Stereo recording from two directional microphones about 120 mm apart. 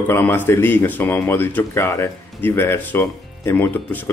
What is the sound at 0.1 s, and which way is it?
Speech, 20° left (ahead or behind).